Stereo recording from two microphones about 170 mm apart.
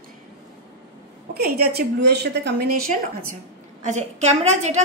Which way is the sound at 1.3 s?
65° right (ahead or behind).